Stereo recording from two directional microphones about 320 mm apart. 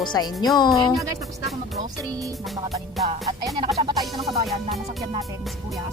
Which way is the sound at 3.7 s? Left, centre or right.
Centre.